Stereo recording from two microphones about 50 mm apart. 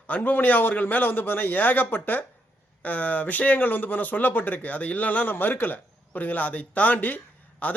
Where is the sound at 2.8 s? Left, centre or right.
Left.